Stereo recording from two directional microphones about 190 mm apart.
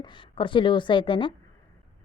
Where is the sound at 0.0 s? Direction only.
25° left (ahead or behind).